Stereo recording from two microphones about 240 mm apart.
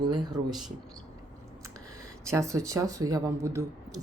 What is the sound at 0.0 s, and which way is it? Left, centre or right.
Speech, centre.